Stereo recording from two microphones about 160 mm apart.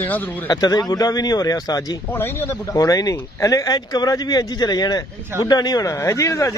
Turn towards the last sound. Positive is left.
turn(degrees=20)  # may be behind; listen again after turning